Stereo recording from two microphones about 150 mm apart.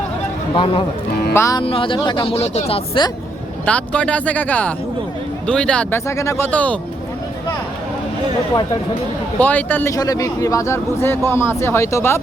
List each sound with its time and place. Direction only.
0.5 s speech: 30° left (ahead or behind)
1.3 s speech: 20° left (ahead or behind)
1.6 s speech: 35° left (ahead or behind)
3.7 s speech: 10° left (ahead or behind)
6.1 s speech: 20° left (ahead or behind)
9.4 s speech: 10° left (ahead or behind)
9.9 s speech: 25° left (ahead or behind)